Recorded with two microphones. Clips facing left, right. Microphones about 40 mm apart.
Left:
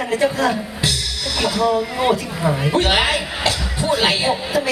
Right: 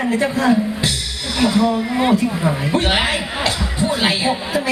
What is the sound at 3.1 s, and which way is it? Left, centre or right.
Music, right.